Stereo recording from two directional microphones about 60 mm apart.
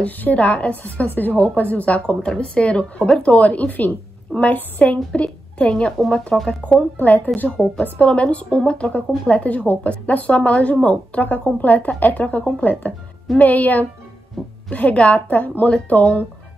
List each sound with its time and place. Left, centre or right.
0.0 s a woman's voice: left
5.7 s a woman's voice: centre
6.6 s a woman's voice: left
7.3 s a woman's voice: centre